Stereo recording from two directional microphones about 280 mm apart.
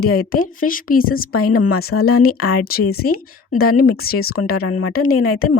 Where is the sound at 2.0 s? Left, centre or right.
Left.